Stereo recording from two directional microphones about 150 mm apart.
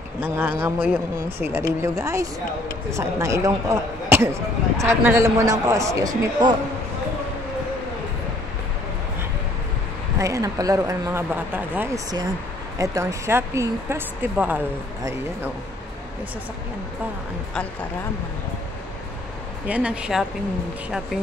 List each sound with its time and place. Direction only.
0.2 s speech: 10° right (ahead or behind)
10.1 s speech: 20° right (ahead or behind)
19.7 s speech: 5° right (ahead or behind)